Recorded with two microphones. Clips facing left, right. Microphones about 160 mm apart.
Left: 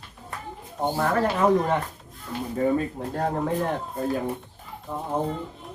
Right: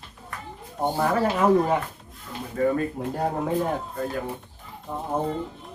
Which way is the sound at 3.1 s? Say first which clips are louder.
Even; 5° right (ahead or behind).